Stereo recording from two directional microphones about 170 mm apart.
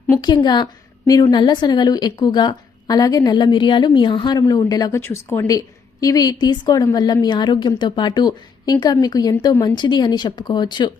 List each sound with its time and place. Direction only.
0.4 s a woman's voice: 25° left (ahead or behind)